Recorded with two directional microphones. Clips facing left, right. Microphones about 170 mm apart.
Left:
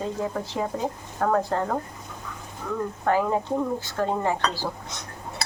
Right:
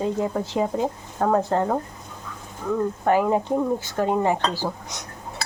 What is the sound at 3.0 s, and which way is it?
Speech, 15° right (ahead or behind).